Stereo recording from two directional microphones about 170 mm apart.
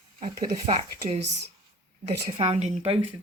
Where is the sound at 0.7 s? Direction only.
35° right (ahead or behind).